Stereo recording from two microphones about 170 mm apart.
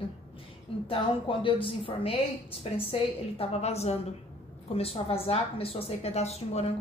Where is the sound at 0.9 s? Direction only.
30° left (ahead or behind).